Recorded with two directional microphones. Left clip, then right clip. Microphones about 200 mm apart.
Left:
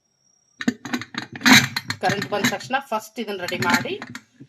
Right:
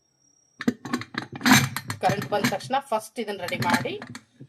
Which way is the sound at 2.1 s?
5° left (ahead or behind).